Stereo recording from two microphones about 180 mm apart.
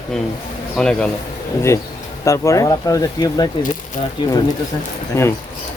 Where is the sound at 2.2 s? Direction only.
15° left (ahead or behind).